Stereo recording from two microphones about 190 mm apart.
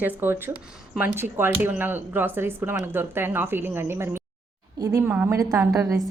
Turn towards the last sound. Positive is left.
turn(degrees=-15)  # may be behind; listen again after turning